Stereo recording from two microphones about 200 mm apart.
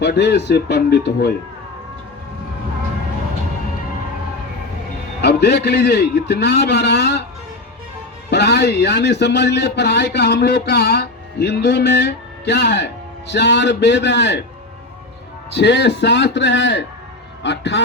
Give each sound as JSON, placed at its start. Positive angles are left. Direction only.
{"t": 0.0, "sound": "speech", "side_deg": 60}
{"t": 5.2, "sound": "speech", "side_deg": 55}
{"t": 8.3, "sound": "speech", "side_deg": 55}
{"t": 15.5, "sound": "speech", "side_deg": 60}